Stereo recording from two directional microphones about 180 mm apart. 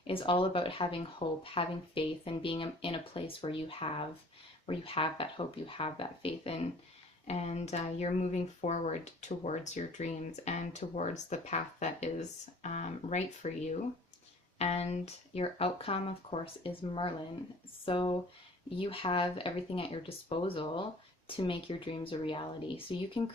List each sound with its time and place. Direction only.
0.1 s speech: 30° left (ahead or behind)
17.8 s speech: 30° left (ahead or behind)